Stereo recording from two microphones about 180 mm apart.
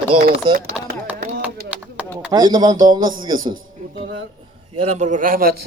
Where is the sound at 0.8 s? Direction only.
5° right (ahead or behind).